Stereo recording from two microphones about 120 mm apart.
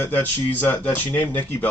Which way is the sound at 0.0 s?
15° left (ahead or behind).